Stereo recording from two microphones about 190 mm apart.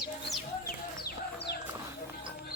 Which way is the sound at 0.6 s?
55° left (ahead or behind).